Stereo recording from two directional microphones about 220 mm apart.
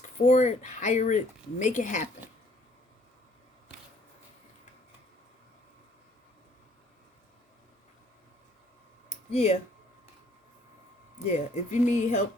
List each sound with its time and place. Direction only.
0.0 s speech: 35° left (ahead or behind)
9.3 s speech: 30° left (ahead or behind)
11.3 s speech: 30° left (ahead or behind)